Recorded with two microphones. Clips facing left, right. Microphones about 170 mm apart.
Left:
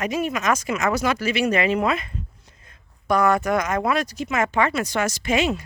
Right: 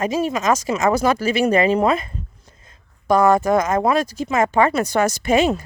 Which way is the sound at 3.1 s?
25° right (ahead or behind).